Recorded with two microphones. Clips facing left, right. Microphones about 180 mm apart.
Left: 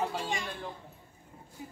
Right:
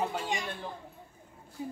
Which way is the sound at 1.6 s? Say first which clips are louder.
Right 8 dB; 30° right (ahead or behind).